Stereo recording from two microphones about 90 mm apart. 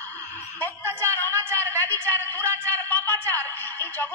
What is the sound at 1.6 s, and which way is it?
A woman's voice, 20° left (ahead or behind).